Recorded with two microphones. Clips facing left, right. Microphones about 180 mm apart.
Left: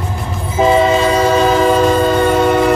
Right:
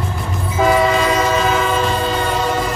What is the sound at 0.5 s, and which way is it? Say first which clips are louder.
Train: left 3 dB; 25° left (ahead or behind).